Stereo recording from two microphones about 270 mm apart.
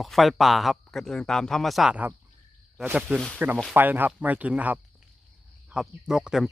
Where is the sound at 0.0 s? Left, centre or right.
Centre.